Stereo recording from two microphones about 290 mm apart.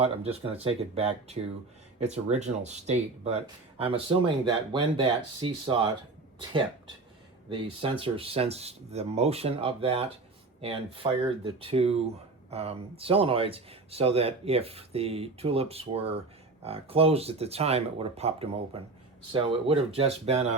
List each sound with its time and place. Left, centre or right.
0.0 s speech: right
7.5 s speech: centre